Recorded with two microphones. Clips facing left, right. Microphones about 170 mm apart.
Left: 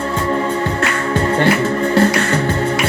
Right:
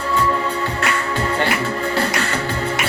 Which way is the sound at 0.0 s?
50° left (ahead or behind).